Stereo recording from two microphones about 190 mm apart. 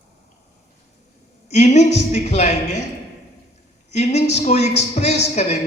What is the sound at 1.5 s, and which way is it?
A man's voice, 35° left (ahead or behind).